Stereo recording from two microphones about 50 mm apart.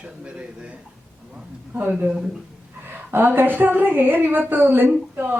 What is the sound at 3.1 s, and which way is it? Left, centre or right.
A woman's voice, right.